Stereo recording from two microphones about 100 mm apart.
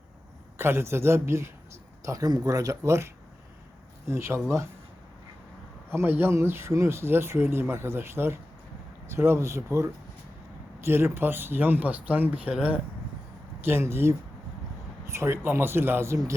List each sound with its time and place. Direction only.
0.6 s speech: 25° right (ahead or behind)
2.0 s speech: 40° right (ahead or behind)
4.1 s speech: 25° right (ahead or behind)
5.9 s speech: 25° right (ahead or behind)
13.7 s speech: 25° right (ahead or behind)